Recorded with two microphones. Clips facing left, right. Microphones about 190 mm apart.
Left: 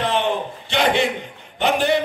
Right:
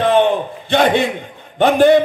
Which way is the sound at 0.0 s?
55° right (ahead or behind).